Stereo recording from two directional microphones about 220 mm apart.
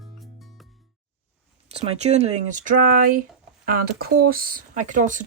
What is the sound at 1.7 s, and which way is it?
Speech, 30° right (ahead or behind).